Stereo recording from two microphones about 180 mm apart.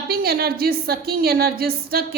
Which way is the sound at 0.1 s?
55° right (ahead or behind).